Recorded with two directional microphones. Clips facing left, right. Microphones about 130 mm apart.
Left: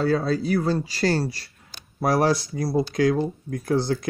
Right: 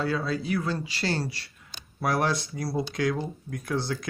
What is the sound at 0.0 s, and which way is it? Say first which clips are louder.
Speech: left 6 dB; 40° left (ahead or behind).